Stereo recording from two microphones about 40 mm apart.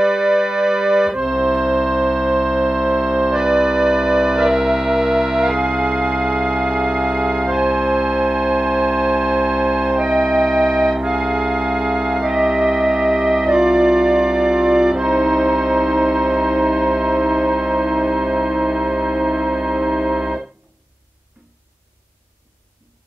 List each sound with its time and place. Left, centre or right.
0.0 s music: centre
10.1 s music: centre
11.0 s music: centre